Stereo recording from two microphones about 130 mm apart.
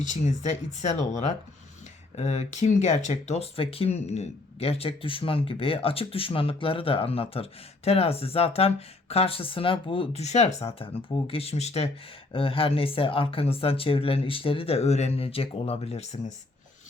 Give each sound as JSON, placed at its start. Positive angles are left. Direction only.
{"t": 0.1, "sound": "speech", "side_deg": 65}
{"t": 10.8, "sound": "speech", "side_deg": 45}